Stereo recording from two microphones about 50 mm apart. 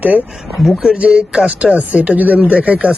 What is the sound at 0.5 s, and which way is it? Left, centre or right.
Speech, centre.